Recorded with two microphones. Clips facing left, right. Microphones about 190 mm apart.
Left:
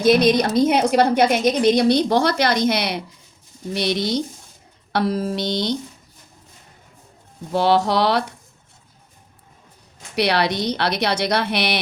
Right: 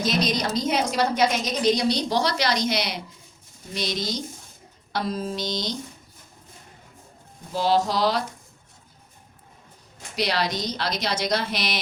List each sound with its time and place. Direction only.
0.0 s a woman's voice: 55° left (ahead or behind)
7.5 s a woman's voice: 65° left (ahead or behind)
10.2 s a woman's voice: 65° left (ahead or behind)